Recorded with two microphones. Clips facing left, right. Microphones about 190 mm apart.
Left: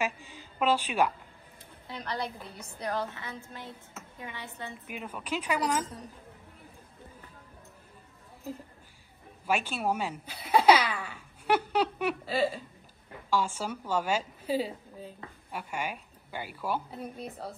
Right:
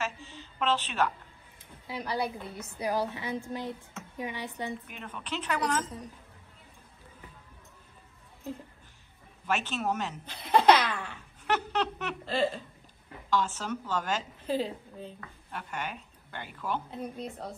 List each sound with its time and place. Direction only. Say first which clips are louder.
0.0 s a sound: left 3 dB; 10° left (ahead or behind)
1.9 s a woman's voice: right 3 dB; 10° right (ahead or behind)
2.9 s a woman's voice: right 4 dB; 15° right (ahead or behind)
4.8 s a woman's voice: left 4 dB; 10° left (ahead or behind)
9.5 s a woman's voice: left 1 dB; 10° left (ahead or behind)